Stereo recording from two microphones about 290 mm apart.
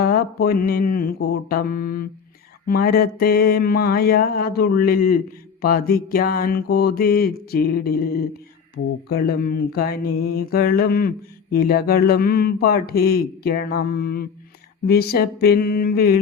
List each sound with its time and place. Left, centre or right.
0.0 s mantra: left